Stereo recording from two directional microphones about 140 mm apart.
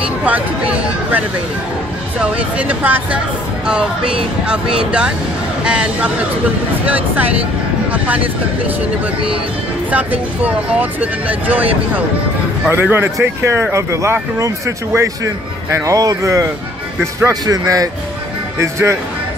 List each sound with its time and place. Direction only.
0.0 s speech: 10° right (ahead or behind)
2.1 s speech: 10° right (ahead or behind)
9.8 s speech: 10° right (ahead or behind)